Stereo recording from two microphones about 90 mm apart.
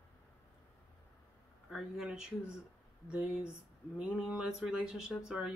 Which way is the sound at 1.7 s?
5° right (ahead or behind).